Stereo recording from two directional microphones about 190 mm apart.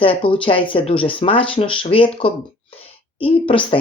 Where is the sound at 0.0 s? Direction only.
25° left (ahead or behind).